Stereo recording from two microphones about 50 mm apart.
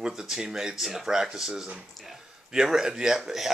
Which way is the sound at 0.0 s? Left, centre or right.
Centre.